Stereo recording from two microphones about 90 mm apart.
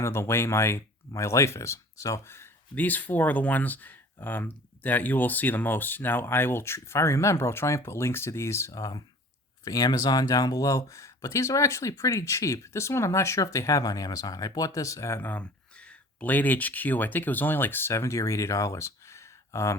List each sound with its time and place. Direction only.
0.0 s speech: 30° left (ahead or behind)
8.7 s speech: 45° left (ahead or behind)
15.2 s speech: 20° left (ahead or behind)